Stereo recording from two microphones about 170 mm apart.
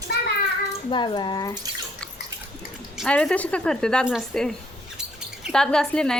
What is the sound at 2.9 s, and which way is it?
Speech, 5° left (ahead or behind).